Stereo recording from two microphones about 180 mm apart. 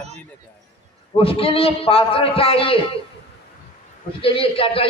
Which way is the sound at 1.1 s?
30° left (ahead or behind).